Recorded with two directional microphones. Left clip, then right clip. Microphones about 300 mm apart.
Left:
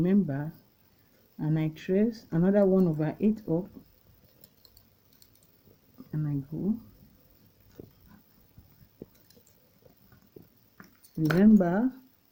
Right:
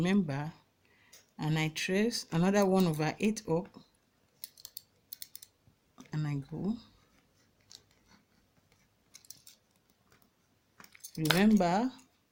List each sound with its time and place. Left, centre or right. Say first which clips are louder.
0.0 s speech: left 4 dB; right
6.1 s speech: left 4 dB; right
11.5 s speech: left 3 dB; right